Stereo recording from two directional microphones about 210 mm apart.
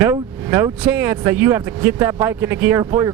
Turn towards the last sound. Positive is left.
turn(degrees=-15)  # may be behind; listen again after turning